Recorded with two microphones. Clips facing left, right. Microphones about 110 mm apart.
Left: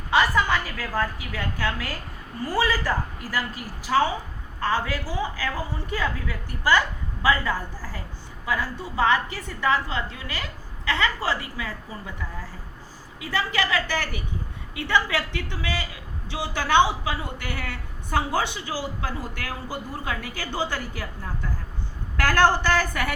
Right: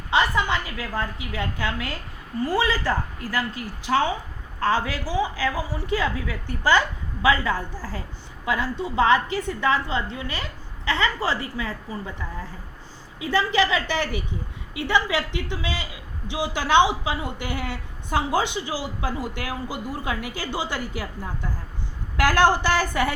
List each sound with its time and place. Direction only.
0.1 s a woman's voice: 20° right (ahead or behind)
4.6 s a man's voice: 15° right (ahead or behind)
13.2 s a woman's voice: 25° right (ahead or behind)
22.2 s a man's voice: 15° right (ahead or behind)